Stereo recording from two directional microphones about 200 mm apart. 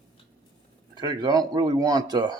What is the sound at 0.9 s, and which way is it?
Speech, 20° right (ahead or behind).